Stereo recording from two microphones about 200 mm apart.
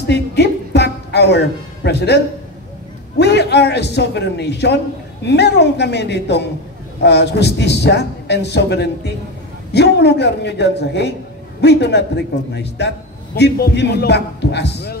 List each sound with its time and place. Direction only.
0.0 s music: 55° left (ahead or behind)
3.2 s a man's voice: 55° left (ahead or behind)